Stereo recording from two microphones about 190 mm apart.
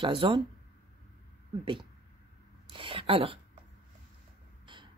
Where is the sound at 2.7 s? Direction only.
30° right (ahead or behind).